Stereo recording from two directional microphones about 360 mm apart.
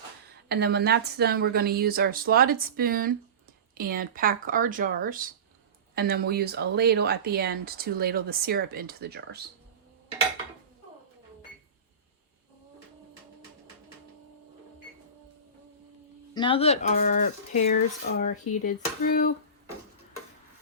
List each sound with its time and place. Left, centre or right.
0.4 s speech: right
16.3 s speech: centre